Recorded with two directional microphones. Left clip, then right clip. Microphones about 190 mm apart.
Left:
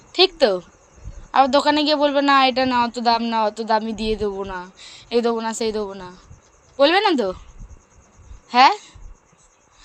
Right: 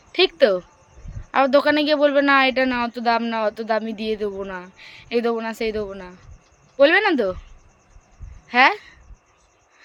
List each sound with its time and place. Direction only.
0.1 s speech: 15° right (ahead or behind)
8.4 s speech: 15° right (ahead or behind)